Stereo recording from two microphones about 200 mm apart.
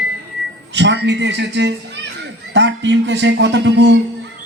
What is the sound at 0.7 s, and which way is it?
Music, 60° right (ahead or behind).